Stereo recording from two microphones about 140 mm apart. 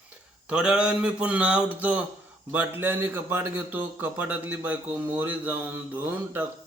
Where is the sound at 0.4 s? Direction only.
5° right (ahead or behind).